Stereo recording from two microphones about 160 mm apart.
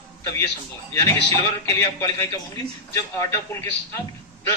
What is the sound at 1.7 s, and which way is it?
A woman's voice, 20° left (ahead or behind).